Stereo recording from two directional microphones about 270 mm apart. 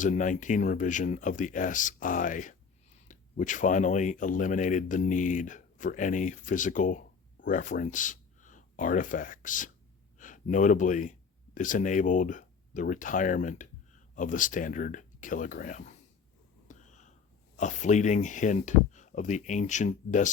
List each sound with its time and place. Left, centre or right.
0.0 s speech: left
16.6 s a sound: left
17.6 s speech: left